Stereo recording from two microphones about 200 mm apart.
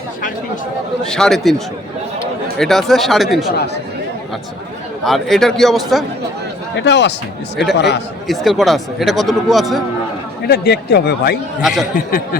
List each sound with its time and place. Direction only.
1.0 s speech: 5° left (ahead or behind)
5.0 s speech: centre (ahead or behind)
6.7 s a man's voice: 60° left (ahead or behind)
8.3 s speech: centre (ahead or behind)
10.4 s a man's voice: 55° left (ahead or behind)
11.6 s speech: centre (ahead or behind)
11.9 s speech: 45° left (ahead or behind)